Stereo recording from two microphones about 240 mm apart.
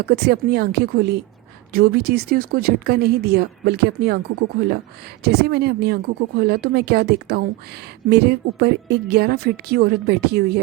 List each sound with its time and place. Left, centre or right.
0.0 s speech: right